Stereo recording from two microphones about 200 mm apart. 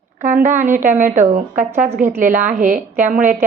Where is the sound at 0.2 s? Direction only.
40° right (ahead or behind).